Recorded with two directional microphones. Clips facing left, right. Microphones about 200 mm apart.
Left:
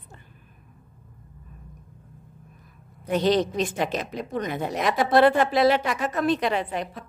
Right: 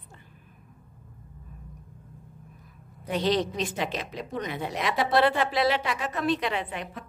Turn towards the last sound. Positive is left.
turn(degrees=40)  # may be behind; listen again after turning